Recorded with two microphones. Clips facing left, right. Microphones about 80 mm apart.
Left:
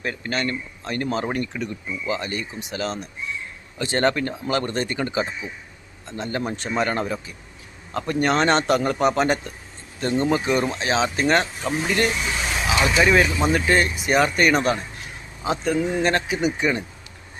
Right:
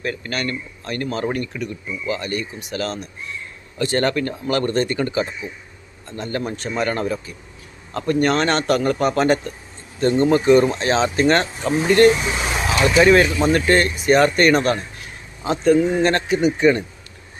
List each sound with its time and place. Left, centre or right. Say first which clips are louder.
0.0 s speech: right 1 dB; left
12.8 s speech: right 5 dB; centre
15.8 s speech: right 5 dB; centre
16.0 s speech: right 4 dB; centre